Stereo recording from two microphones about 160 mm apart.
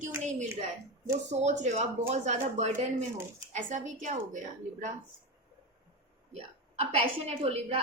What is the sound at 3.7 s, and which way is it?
Speech, 50° right (ahead or behind).